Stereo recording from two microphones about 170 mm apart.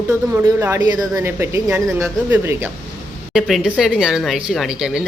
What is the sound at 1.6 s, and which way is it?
Speech, centre (ahead or behind).